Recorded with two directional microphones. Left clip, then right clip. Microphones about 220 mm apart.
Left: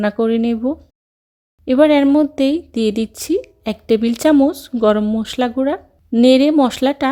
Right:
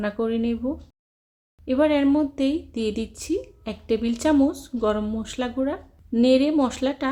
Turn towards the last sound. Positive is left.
turn(degrees=35)  # may be behind; listen again after turning